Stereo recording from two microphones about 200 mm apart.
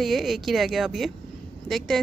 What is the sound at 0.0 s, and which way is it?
Speech, centre (ahead or behind).